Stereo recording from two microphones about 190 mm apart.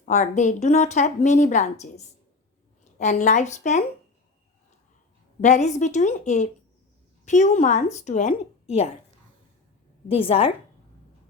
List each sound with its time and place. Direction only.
0.0 s speech: 40° left (ahead or behind)
5.4 s speech: 40° left (ahead or behind)
10.1 s speech: 30° left (ahead or behind)